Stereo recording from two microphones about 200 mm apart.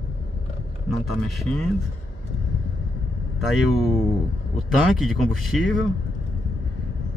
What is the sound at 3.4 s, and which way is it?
Speech, centre (ahead or behind).